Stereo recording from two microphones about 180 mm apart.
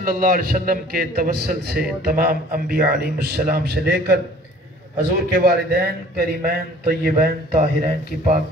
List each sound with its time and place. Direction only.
0.0 s a man's voice: 50° right (ahead or behind)
7.5 s speech: 35° right (ahead or behind)